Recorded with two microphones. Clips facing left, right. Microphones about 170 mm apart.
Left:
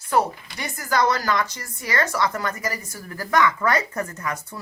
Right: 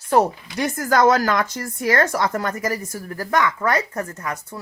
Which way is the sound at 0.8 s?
50° right (ahead or behind).